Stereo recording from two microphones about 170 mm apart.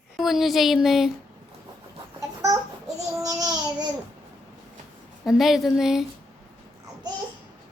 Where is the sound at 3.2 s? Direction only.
20° right (ahead or behind).